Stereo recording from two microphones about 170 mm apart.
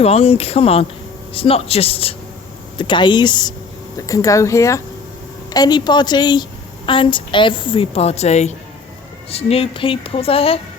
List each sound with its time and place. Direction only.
0.0 s a woman's voice: 35° left (ahead or behind)